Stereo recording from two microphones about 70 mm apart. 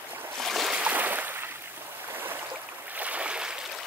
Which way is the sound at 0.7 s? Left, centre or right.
Right.